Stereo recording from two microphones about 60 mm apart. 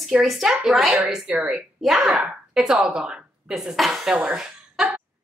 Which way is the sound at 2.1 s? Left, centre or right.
Centre.